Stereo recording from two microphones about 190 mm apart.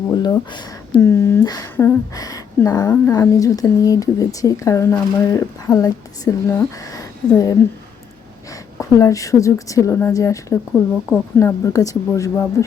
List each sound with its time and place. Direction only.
0.1 s speech: 20° left (ahead or behind)
8.8 s speech: 15° left (ahead or behind)